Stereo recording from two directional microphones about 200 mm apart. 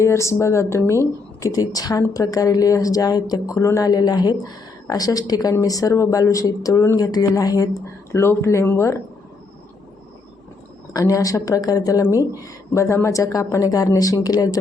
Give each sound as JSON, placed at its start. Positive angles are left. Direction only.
{"t": 0.0, "sound": "speech", "side_deg": 15}
{"t": 10.9, "sound": "speech", "side_deg": 15}